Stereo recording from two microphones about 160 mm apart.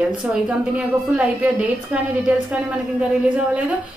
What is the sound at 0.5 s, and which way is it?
A woman's voice, 5° right (ahead or behind).